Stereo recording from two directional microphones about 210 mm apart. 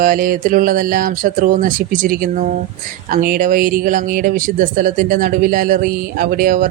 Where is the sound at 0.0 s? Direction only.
40° right (ahead or behind).